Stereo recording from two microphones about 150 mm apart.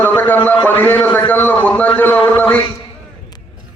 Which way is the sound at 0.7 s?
15° left (ahead or behind).